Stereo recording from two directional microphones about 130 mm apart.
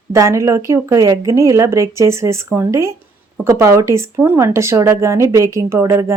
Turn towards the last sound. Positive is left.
turn(degrees=-20)  # may be behind; listen again after turning